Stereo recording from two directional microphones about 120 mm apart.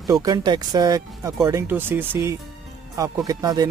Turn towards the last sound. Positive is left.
turn(degrees=-35)  # may be behind; listen again after turning